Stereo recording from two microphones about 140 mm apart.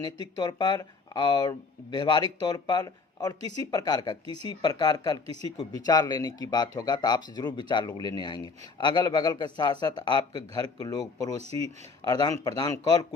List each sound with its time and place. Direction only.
0.0 s speech: 30° left (ahead or behind)
11.4 s speech: 50° right (ahead or behind)
12.0 s speech: 25° left (ahead or behind)